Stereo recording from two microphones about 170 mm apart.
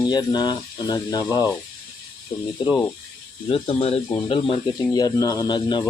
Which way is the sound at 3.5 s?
35° left (ahead or behind).